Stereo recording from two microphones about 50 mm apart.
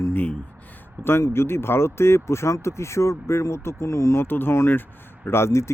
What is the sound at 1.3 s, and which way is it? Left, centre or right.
Speech, left.